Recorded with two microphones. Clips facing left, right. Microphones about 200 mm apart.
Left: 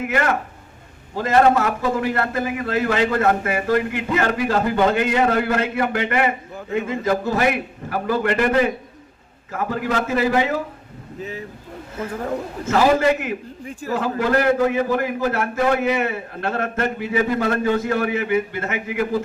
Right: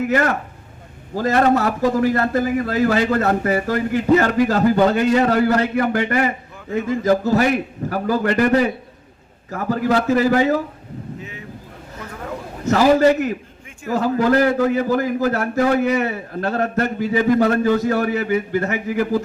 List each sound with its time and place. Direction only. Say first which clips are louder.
1.2 s a man's voice: even; 40° right (ahead or behind)
11.2 s a sound: left 5 dB; 35° left (ahead or behind)
12.6 s a man's voice: right 3 dB; 40° right (ahead or behind)